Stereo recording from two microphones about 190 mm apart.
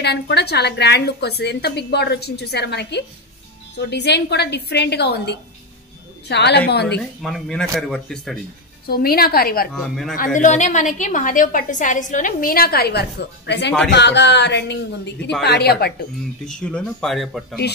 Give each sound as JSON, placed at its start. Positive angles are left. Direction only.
{"t": 0.0, "sound": "a woman's voice", "side_deg": 60}
{"t": 7.2, "sound": "speech", "side_deg": 0}
{"t": 8.8, "sound": "a woman's voice", "side_deg": 50}
{"t": 9.7, "sound": "speech", "side_deg": 0}
{"t": 10.1, "sound": "a woman's voice", "side_deg": 45}
{"t": 16.4, "sound": "speech", "side_deg": 5}